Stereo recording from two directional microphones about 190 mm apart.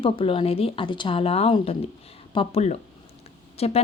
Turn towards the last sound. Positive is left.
turn(degrees=35)  # may be behind; listen again after turning